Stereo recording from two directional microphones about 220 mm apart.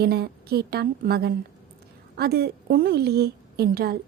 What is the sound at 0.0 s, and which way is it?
A woman's voice, 45° right (ahead or behind).